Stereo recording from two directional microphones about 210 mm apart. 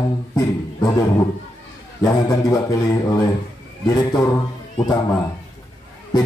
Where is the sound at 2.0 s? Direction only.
15° left (ahead or behind).